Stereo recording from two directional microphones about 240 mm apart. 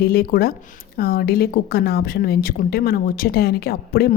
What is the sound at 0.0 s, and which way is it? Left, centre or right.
Speech, left.